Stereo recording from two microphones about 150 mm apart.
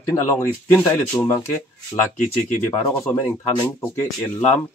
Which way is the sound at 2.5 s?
20° left (ahead or behind).